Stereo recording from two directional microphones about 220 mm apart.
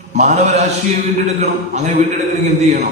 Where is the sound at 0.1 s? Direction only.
30° right (ahead or behind).